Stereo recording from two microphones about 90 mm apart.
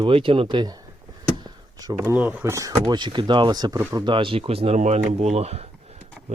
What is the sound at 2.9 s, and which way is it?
Speech, 55° right (ahead or behind).